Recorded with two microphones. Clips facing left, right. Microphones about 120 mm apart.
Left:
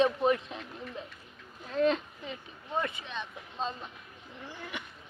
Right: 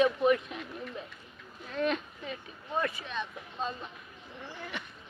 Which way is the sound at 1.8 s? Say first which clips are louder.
Left 4 dB; 25° left (ahead or behind).